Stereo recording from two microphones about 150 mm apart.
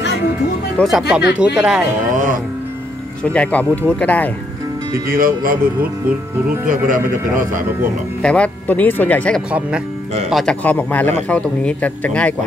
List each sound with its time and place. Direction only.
0.7 s speech: centre (ahead or behind)
3.3 s speech: 10° left (ahead or behind)
4.9 s speech: 75° right (ahead or behind)
8.2 s speech: 10° left (ahead or behind)